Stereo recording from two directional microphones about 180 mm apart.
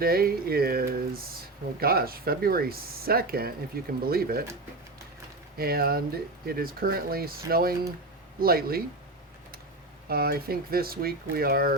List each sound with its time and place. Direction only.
0.0 s speech: 55° right (ahead or behind)
5.5 s speech: 55° right (ahead or behind)
10.1 s speech: 60° right (ahead or behind)